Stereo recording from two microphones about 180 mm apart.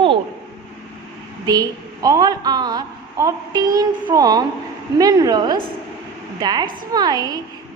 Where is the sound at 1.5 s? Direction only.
20° right (ahead or behind).